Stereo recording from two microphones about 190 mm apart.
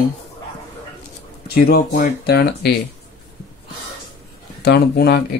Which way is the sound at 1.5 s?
50° left (ahead or behind).